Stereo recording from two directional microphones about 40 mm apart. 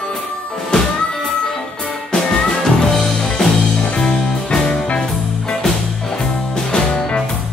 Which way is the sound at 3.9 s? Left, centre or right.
Centre.